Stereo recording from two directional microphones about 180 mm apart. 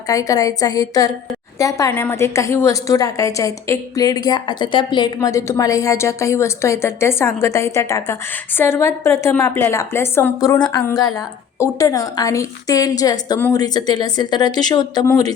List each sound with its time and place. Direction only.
0.1 s a woman's voice: 20° left (ahead or behind)